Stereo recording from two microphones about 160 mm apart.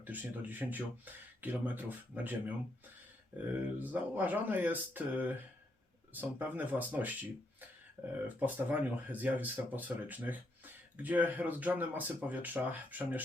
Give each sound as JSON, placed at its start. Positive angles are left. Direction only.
{"t": 0.0, "sound": "speech", "side_deg": -10}
{"t": 3.3, "sound": "speech", "side_deg": -10}